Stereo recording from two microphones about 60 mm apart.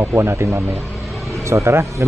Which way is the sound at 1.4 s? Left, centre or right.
Right.